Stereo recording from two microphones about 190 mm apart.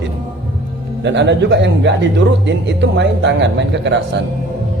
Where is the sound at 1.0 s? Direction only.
70° right (ahead or behind).